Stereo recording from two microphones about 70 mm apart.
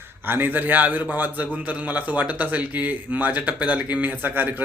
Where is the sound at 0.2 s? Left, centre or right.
Right.